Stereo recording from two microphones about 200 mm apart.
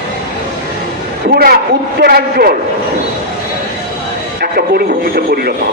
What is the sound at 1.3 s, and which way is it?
Speech, 50° right (ahead or behind).